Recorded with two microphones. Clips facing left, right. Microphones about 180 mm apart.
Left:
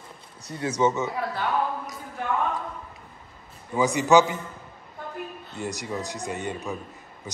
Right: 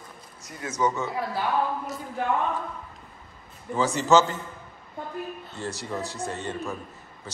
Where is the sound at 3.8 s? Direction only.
15° left (ahead or behind).